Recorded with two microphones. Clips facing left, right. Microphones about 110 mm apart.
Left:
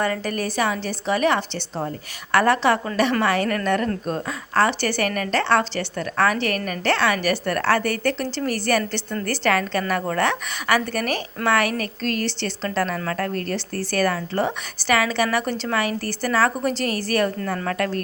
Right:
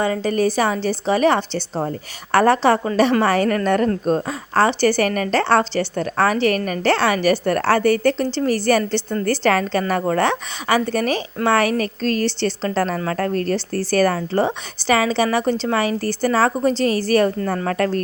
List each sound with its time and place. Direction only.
0.0 s a woman's voice: 20° right (ahead or behind)